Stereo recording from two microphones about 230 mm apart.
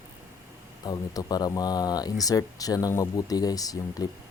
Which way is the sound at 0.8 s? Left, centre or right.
Centre.